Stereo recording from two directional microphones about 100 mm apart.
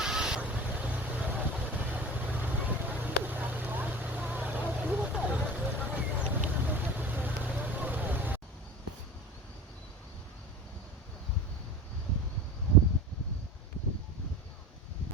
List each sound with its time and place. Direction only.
0.0 s vehicle: 5° right (ahead or behind)